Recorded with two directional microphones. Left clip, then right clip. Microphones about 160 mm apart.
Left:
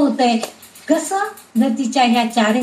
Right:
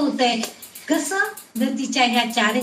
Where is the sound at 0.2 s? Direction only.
20° left (ahead or behind).